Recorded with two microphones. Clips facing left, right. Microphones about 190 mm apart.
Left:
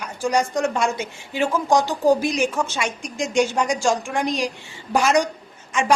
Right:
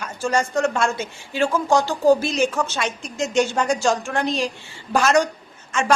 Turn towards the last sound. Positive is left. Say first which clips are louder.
# even
turn(degrees=15)  # may be behind; listen again after turning